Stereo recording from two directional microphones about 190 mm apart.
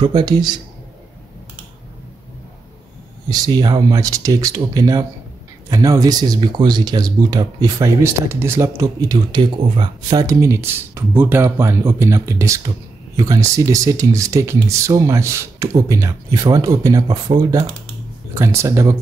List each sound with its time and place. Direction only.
0.0 s speech: 20° right (ahead or behind)
3.3 s speech: 20° right (ahead or behind)